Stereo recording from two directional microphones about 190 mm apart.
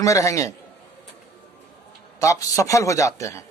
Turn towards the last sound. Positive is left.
turn(degrees=15)  # may be behind; listen again after turning